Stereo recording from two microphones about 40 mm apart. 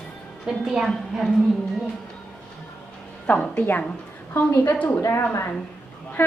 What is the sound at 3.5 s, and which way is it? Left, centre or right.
Speech, left.